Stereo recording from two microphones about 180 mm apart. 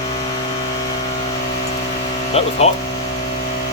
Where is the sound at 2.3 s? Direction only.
35° left (ahead or behind).